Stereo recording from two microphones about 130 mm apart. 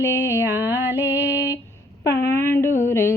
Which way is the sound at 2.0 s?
25° left (ahead or behind).